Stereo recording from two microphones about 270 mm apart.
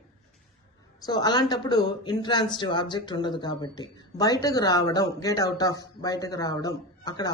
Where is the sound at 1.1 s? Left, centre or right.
Centre.